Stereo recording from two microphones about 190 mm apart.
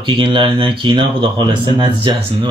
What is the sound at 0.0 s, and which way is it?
Speech, 25° right (ahead or behind).